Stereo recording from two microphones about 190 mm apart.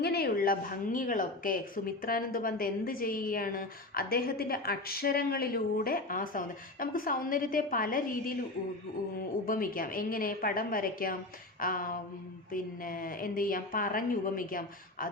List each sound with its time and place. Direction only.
0.0 s a woman's voice: 55° left (ahead or behind)
9.5 s a woman's voice: 50° left (ahead or behind)